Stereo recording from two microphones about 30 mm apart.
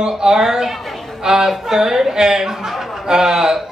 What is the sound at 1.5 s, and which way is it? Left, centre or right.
Speech, centre.